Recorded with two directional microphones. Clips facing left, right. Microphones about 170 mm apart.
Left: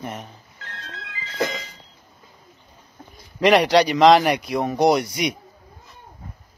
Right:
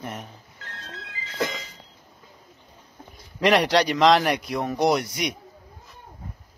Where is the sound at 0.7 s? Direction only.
90° left.